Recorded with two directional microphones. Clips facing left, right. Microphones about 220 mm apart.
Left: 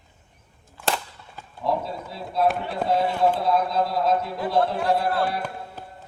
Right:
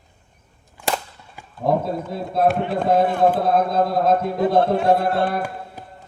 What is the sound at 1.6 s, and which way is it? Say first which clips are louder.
Speech: right 6 dB; 50° right (ahead or behind).